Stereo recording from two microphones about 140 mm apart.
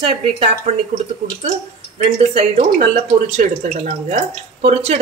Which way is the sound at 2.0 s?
50° right (ahead or behind).